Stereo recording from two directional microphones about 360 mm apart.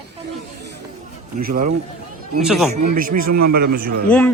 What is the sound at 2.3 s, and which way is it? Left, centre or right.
Speech, centre.